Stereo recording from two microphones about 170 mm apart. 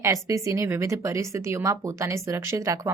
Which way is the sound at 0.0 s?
20° right (ahead or behind).